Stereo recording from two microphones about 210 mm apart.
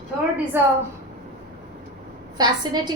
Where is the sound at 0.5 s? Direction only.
10° right (ahead or behind).